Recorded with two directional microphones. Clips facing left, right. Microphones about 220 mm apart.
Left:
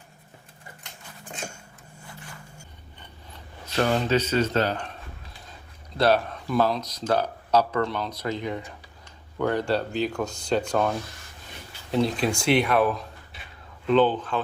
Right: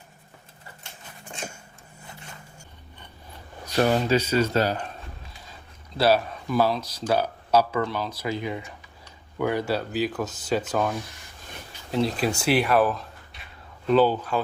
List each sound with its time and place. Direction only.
2.0 s a sound: 20° right (ahead or behind)
3.8 s speech: 10° right (ahead or behind)
6.0 s speech: 5° right (ahead or behind)